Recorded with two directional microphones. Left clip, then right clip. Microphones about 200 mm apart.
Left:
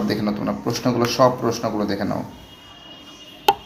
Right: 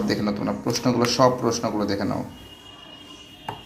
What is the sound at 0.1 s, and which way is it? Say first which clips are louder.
A man's voice: left 1 dB; 5° right (ahead or behind).